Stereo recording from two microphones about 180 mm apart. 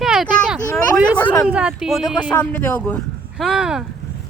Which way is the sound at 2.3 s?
10° left (ahead or behind).